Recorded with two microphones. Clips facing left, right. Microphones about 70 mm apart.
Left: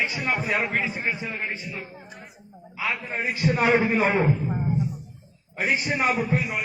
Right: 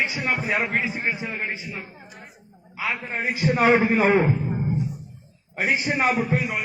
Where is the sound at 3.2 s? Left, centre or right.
Centre.